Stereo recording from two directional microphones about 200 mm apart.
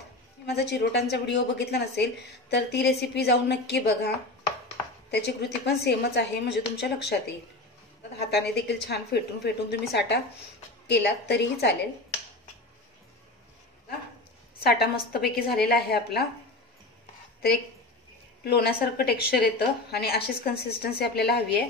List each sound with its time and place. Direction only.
0.5 s a woman's voice: 55° left (ahead or behind)
5.1 s a woman's voice: 55° left (ahead or behind)
8.2 s a woman's voice: 55° left (ahead or behind)
14.6 s a woman's voice: 50° left (ahead or behind)
18.4 s a woman's voice: 50° left (ahead or behind)